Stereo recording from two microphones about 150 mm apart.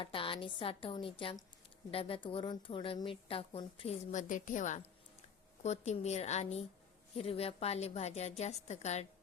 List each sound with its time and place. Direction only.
0.0 s a woman's voice: 35° left (ahead or behind)
4.1 s a woman's voice: 55° left (ahead or behind)